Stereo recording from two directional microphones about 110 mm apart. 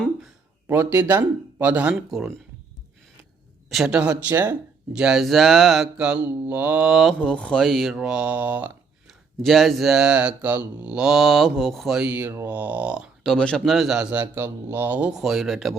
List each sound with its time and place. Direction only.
0.7 s mantra: 20° right (ahead or behind)
3.7 s mantra: 5° right (ahead or behind)
7.2 s speech: 5° left (ahead or behind); by 8.7 s 15° right (ahead or behind)
9.0 s speech: centre (ahead or behind)
12.3 s mantra: 20° right (ahead or behind)
13.2 s speech: 5° left (ahead or behind)